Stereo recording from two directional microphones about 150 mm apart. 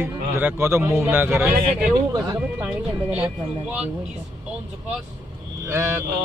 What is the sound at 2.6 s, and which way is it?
A man's voice, 10° right (ahead or behind).